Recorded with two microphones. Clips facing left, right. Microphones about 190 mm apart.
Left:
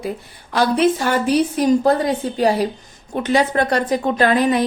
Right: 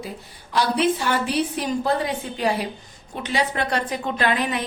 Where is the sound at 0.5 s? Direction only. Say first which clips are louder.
Left 5 dB; 45° left (ahead or behind).